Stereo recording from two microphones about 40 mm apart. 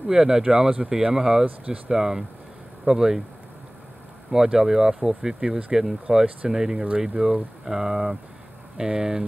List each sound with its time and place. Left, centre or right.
0.0 s speech: centre
4.3 s speech: centre